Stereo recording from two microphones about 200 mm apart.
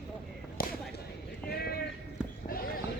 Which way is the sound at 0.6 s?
50° left (ahead or behind).